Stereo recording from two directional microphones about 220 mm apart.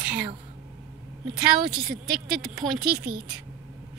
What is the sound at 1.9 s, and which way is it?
Speech, 40° right (ahead or behind).